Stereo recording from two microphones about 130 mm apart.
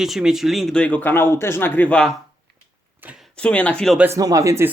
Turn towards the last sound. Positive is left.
turn(degrees=-20)  # may be behind; listen again after turning